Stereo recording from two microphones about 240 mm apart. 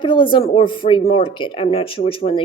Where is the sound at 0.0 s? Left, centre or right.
Left.